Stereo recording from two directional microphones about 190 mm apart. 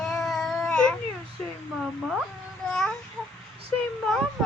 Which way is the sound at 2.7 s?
5° left (ahead or behind).